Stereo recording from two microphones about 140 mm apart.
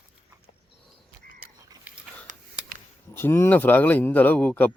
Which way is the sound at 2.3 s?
60° right (ahead or behind).